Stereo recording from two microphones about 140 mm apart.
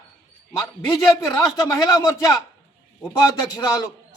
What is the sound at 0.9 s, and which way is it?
A man's voice, 25° left (ahead or behind).